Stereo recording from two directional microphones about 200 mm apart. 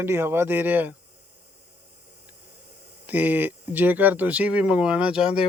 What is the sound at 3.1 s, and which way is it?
Speech, 10° right (ahead or behind).